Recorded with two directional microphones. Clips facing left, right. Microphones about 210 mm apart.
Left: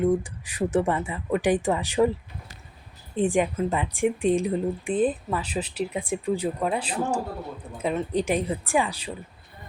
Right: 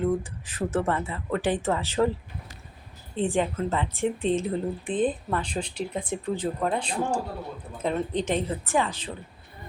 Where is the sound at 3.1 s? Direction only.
15° left (ahead or behind).